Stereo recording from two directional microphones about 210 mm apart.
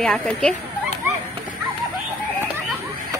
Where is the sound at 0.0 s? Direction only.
5° left (ahead or behind).